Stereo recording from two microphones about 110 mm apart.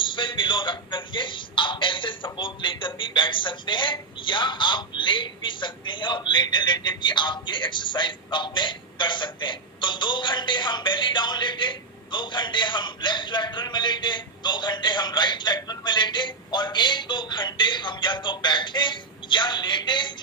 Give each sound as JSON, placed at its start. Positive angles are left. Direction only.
{"t": 0.0, "sound": "a man's voice", "side_deg": 50}